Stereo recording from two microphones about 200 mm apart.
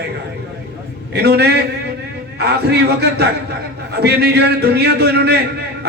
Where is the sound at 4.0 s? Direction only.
55° right (ahead or behind).